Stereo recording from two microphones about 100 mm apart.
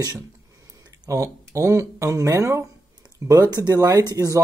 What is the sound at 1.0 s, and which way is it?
Speech, 35° right (ahead or behind).